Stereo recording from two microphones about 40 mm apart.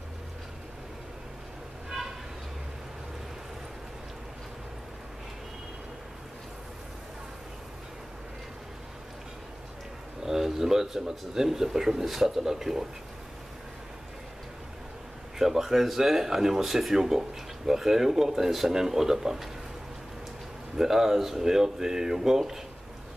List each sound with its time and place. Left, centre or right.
10.2 s speech: centre
15.3 s speech: centre
20.7 s speech: centre